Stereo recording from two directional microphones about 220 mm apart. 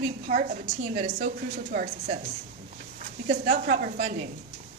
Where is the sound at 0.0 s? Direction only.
35° right (ahead or behind).